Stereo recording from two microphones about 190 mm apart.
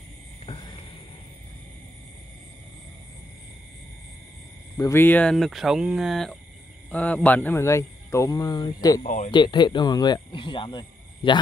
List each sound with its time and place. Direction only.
0.5 s a sound: 30° left (ahead or behind)
4.7 s a man's voice: 15° left (ahead or behind)
9.0 s speech: 45° left (ahead or behind)
9.3 s speech: 25° left (ahead or behind)